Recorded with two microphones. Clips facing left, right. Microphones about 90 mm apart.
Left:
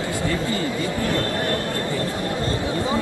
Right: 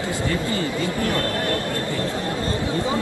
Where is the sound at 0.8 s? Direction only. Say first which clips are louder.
Even; 20° left (ahead or behind).